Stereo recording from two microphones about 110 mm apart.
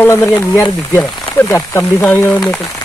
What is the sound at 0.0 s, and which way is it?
Speech, 20° left (ahead or behind).